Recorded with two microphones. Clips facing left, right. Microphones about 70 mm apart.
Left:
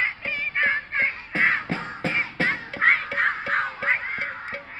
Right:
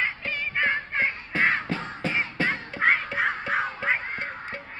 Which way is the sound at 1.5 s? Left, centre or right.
Centre.